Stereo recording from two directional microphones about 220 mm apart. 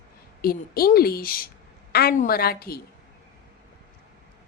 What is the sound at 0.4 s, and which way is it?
A woman's voice, 45° left (ahead or behind).